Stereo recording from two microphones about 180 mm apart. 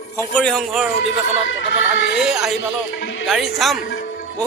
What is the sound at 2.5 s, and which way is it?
Music, 90° left.